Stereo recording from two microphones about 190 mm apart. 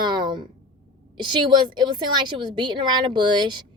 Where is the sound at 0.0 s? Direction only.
25° right (ahead or behind).